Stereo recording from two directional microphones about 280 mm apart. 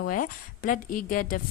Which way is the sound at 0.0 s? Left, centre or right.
Left.